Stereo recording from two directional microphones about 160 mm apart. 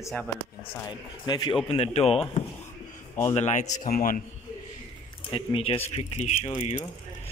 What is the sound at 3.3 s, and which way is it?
Speech, 45° left (ahead or behind).